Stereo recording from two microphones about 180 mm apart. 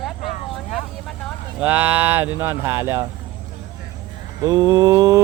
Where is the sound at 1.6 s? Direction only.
10° right (ahead or behind).